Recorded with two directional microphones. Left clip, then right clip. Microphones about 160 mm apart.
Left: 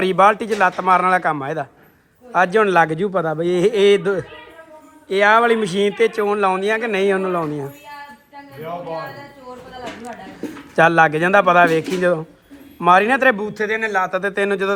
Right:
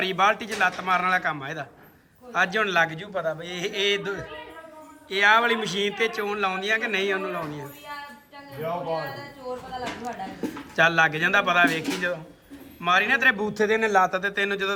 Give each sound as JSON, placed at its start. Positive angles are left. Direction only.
{"t": 0.0, "sound": "a man's voice", "side_deg": 0}
{"t": 3.4, "sound": "mantra", "side_deg": 5}
{"t": 5.0, "sound": "a man's voice", "side_deg": 5}
{"t": 9.8, "sound": "a man's voice", "side_deg": 0}
{"t": 13.3, "sound": "speech", "side_deg": -25}
{"t": 14.2, "sound": "a man's voice", "side_deg": 0}